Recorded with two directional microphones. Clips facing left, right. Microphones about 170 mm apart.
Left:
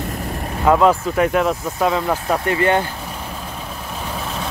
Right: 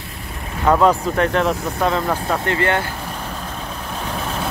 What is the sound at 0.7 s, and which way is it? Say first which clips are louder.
Speech: left 1 dB; 5° left (ahead or behind).